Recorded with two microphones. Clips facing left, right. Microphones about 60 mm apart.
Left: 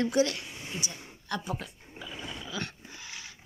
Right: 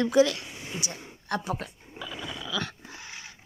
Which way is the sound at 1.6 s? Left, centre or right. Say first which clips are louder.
Right 4 dB; right.